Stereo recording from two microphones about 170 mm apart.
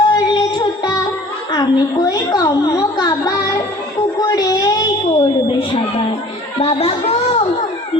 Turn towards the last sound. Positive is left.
turn(degrees=35)  # may be behind; listen again after turning